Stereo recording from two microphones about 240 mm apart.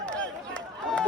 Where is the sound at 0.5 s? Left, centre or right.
Centre.